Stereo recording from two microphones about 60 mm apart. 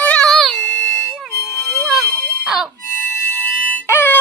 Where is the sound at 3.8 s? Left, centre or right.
Left.